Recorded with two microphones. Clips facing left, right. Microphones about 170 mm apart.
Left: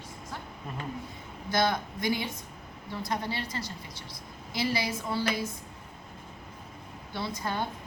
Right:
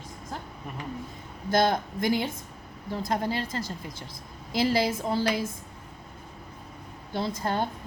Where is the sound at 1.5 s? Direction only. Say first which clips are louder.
Right 4 dB; 50° right (ahead or behind).